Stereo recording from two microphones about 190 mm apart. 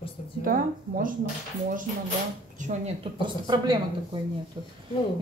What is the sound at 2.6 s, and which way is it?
Speech, 35° right (ahead or behind).